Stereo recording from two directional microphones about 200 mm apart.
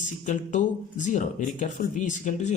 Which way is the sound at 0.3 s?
40° left (ahead or behind).